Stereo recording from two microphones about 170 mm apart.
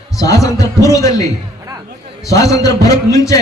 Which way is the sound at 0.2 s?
20° left (ahead or behind).